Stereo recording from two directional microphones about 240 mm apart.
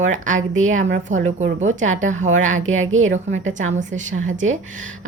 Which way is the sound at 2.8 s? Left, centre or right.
Right.